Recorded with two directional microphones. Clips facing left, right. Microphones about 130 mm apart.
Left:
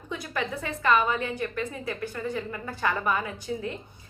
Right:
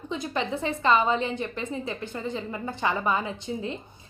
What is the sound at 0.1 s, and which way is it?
A woman's voice, 25° right (ahead or behind).